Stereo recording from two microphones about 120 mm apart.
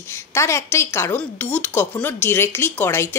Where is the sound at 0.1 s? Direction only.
20° left (ahead or behind).